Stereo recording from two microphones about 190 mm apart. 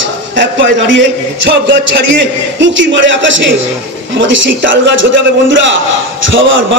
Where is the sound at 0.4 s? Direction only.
75° right (ahead or behind).